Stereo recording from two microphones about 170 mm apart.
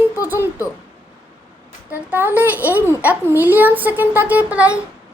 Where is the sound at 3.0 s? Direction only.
10° right (ahead or behind).